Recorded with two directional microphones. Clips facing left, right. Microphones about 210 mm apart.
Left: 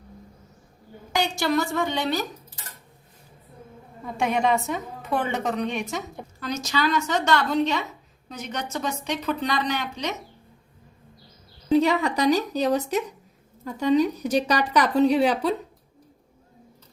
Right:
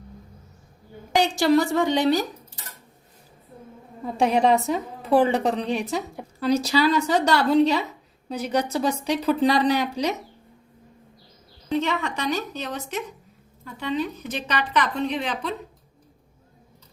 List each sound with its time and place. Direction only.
1.4 s a woman's voice: 35° right (ahead or behind)
4.0 s a woman's voice: 30° right (ahead or behind)
11.7 s speech: 35° left (ahead or behind)